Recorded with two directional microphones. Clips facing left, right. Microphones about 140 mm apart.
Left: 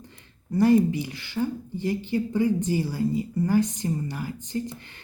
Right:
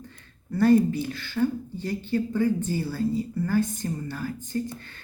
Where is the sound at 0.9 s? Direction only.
15° left (ahead or behind).